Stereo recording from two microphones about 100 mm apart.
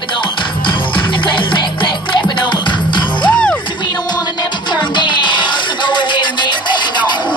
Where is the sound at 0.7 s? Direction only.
55° left (ahead or behind).